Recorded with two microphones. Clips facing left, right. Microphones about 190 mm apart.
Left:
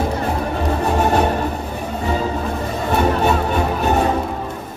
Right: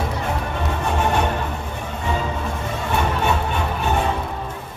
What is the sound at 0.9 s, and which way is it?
Music, 35° left (ahead or behind).